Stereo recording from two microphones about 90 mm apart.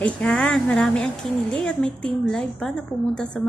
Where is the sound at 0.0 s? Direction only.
10° left (ahead or behind).